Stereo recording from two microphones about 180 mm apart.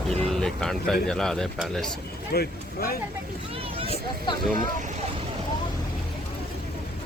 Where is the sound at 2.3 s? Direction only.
60° left (ahead or behind).